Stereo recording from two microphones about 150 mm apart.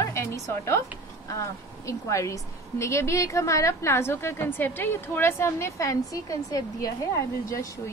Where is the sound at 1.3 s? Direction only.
20° left (ahead or behind).